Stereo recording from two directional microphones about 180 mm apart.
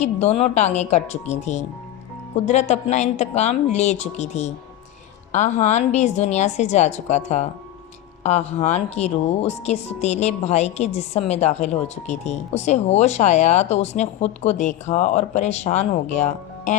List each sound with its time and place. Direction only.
0.0 s speech: 40° left (ahead or behind)